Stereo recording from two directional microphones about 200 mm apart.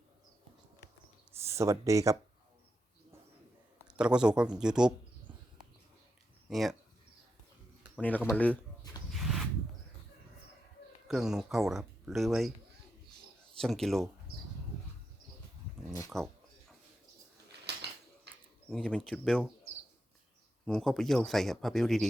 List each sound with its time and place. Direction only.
1.4 s speech: 15° right (ahead or behind)
3.8 s speech: 5° right (ahead or behind)
6.5 s speech: centre (ahead or behind)
7.9 s speech: 5° left (ahead or behind)
9.1 s a sound: centre (ahead or behind)
11.1 s speech: centre (ahead or behind)
13.6 s speech: centre (ahead or behind)
16.1 s speech: centre (ahead or behind)
17.8 s a sound: 55° right (ahead or behind)
18.7 s speech: 5° left (ahead or behind)
20.7 s speech: centre (ahead or behind)